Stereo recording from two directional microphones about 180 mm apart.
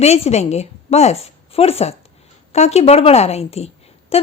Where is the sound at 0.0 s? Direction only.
35° left (ahead or behind).